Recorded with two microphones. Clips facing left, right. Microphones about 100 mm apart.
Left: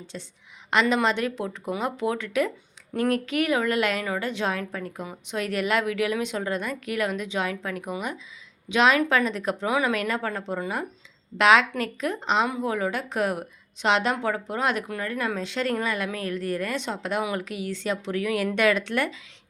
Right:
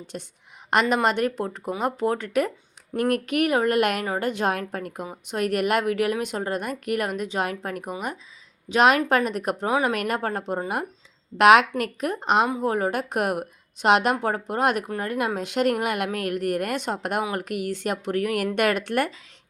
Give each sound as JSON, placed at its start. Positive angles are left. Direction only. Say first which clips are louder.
{"t": 0.1, "sound": "a woman's voice", "louder": "right 3 dB", "side_deg": -55}
{"t": 9.6, "sound": "speech", "louder": "right 2 dB", "side_deg": -35}
{"t": 9.9, "sound": "a woman's voice", "louder": "right 1 dB", "side_deg": -55}